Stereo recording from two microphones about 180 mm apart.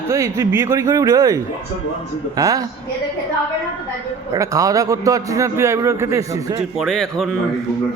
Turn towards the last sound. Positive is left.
turn(degrees=5)  # may be behind; listen again after turning